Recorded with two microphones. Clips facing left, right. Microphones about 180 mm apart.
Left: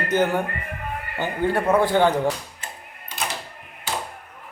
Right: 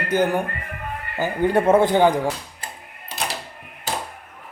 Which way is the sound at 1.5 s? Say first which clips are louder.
Right 3 dB; 25° right (ahead or behind).